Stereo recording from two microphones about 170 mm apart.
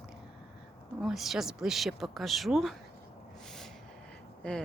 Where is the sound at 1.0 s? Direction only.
Centre (ahead or behind).